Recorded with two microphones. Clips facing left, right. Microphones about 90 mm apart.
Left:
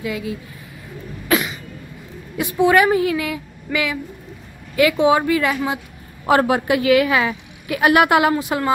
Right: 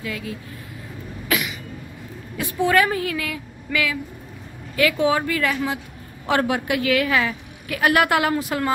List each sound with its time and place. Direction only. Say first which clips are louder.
0.0 s a woman's voice: left 5 dB; 15° left (ahead or behind)
1.3 s cough: left 5 dB; 35° left (ahead or behind)
2.3 s a woman's voice: left 4 dB; 15° left (ahead or behind)
8.4 s a woman's voice: left 3 dB; 5° left (ahead or behind)